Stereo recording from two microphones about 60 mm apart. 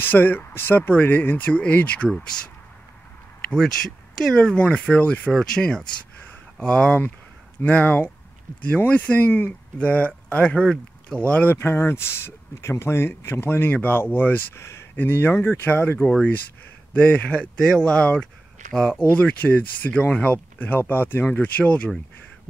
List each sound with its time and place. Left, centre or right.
0.0 s speech: left
2.0 s speech: centre
3.5 s speech: centre
4.9 s speech: left
5.3 s speech: centre
7.6 s speech: left
10.5 s speech: centre
11.2 s speech: left
11.5 s speech: left
14.6 s a sound: left
15.0 s speech: left
16.9 s speech: centre; by 21.3 s left
21.3 s speech: left